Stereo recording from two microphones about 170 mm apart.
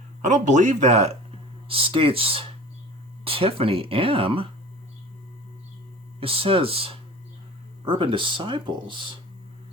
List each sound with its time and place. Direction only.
0.2 s speech: 45° right (ahead or behind)
6.1 s speech: 35° right (ahead or behind)